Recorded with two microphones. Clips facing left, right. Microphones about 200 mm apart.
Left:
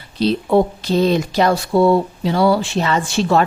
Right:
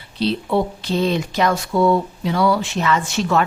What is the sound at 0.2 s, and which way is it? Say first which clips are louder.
A woman's voice: left 4 dB; 45° left (ahead or behind).